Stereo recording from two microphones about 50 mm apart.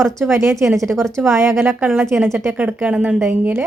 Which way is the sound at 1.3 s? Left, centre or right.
Right.